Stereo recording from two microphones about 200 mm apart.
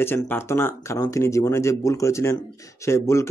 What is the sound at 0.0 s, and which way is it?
Speech, 10° left (ahead or behind).